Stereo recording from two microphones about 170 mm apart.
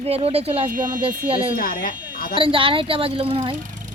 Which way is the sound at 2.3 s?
30° right (ahead or behind).